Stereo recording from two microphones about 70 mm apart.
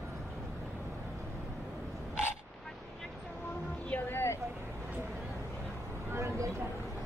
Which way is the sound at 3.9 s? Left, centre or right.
Left.